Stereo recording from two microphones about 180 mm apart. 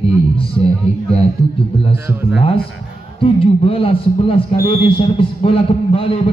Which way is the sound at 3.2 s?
30° left (ahead or behind).